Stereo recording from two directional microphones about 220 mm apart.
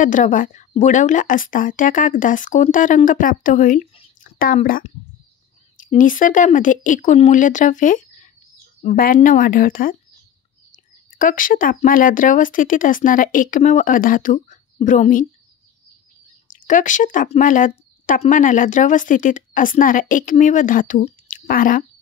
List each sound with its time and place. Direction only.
0.0 s speech: 35° left (ahead or behind)
4.2 s a sound: 40° left (ahead or behind)
4.6 s speech: 40° left (ahead or behind)
11.1 s speech: 40° left (ahead or behind)
16.5 s speech: 35° left (ahead or behind)